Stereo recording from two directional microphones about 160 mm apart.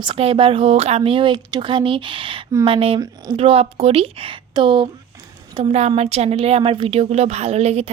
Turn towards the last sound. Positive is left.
turn(degrees=-45)  # may be behind; listen again after turning